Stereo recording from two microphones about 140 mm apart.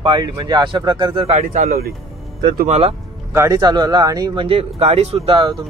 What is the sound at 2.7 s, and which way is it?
Speech, 45° right (ahead or behind).